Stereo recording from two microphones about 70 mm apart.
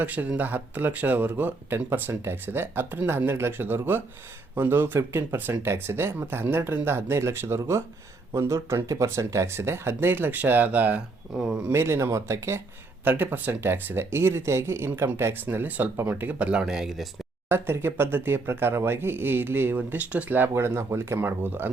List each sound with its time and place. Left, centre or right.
0.0 s speech: right
11.7 s speech: right
13.1 s speech: right
15.4 s speech: right
16.5 s speech: centre
17.5 s speech: right